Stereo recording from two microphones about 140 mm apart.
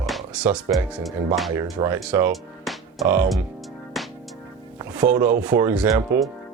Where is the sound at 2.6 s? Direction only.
Centre (ahead or behind).